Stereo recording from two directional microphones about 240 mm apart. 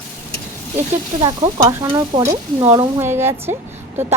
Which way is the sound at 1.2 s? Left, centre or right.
Centre.